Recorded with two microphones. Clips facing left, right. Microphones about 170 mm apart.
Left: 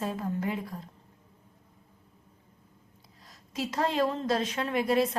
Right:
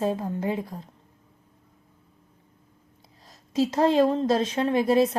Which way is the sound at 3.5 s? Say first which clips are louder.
Right 9 dB; 25° right (ahead or behind).